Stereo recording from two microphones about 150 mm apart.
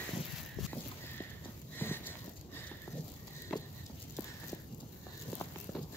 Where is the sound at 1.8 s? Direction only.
15° left (ahead or behind).